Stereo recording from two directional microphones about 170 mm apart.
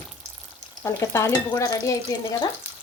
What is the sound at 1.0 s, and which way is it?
Speech, 15° left (ahead or behind).